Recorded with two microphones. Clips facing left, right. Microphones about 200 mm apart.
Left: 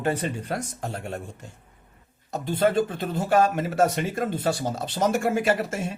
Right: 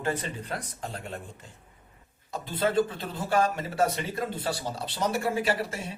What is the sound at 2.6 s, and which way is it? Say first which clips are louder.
A man's voice: left 3 dB; 45° left (ahead or behind).